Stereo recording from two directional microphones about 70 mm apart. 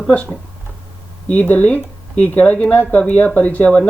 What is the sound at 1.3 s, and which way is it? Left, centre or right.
Speech, left.